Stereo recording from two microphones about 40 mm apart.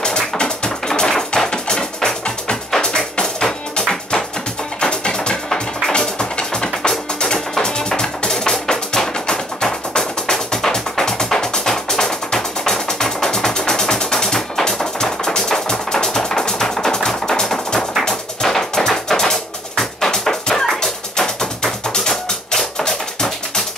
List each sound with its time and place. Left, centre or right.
0.0 s music: left